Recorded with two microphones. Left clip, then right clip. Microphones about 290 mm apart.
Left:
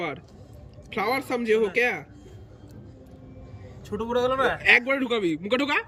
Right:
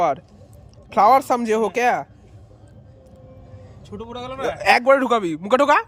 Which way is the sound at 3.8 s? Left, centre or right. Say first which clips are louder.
Left 8 dB; centre.